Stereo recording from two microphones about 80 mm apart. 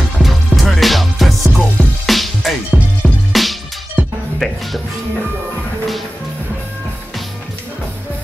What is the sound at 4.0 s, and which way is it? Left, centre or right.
Music, centre.